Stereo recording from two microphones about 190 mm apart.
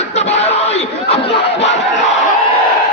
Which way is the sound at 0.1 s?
35° left (ahead or behind).